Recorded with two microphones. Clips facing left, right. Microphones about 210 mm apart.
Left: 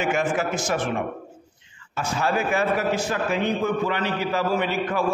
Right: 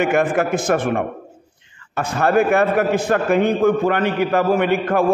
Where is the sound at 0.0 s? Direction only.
60° right (ahead or behind).